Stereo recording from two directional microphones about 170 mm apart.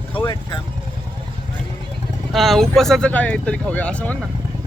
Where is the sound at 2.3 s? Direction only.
Centre (ahead or behind).